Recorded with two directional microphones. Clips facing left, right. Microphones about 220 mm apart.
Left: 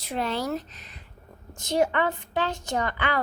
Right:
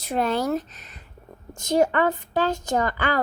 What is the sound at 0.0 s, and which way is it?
A woman's voice, 50° right (ahead or behind).